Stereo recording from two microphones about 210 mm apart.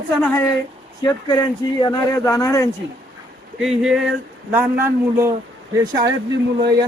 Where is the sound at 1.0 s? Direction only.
20° left (ahead or behind).